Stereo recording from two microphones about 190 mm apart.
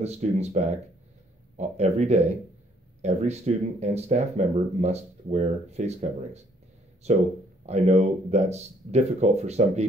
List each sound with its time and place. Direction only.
0.0 s speech: 35° right (ahead or behind)